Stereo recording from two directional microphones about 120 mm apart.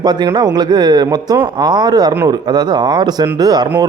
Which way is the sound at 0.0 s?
35° right (ahead or behind).